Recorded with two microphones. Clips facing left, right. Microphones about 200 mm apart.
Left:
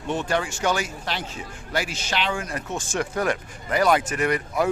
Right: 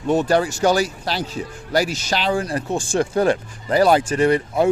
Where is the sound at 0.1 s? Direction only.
40° right (ahead or behind).